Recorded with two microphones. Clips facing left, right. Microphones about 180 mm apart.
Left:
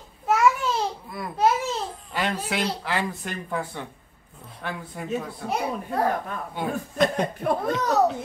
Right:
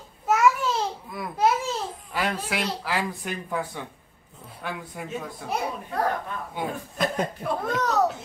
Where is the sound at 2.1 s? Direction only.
5° right (ahead or behind).